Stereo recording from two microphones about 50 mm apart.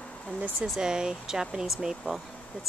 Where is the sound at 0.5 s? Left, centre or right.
Centre.